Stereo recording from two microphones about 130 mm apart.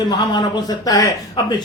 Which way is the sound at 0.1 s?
30° left (ahead or behind).